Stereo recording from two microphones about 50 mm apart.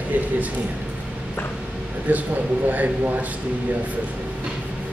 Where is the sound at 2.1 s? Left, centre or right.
Right.